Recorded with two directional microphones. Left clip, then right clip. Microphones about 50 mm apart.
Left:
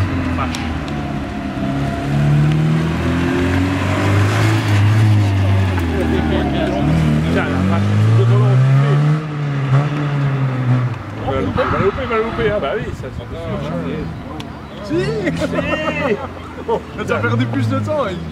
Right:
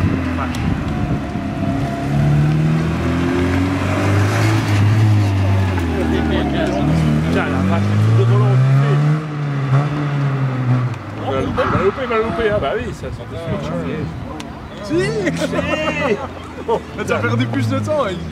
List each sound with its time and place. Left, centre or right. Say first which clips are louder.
0.1 s vehicle: even; centre
1.8 s vehicle: even; centre
5.2 s music: even; centre
6.5 s vehicle: even; right
6.9 s vehicle: even; centre
11.2 s vehicle: even; right
11.5 s a sound: even; centre
12.0 s a sound: even; right
14.9 s speech: right 1 dB; right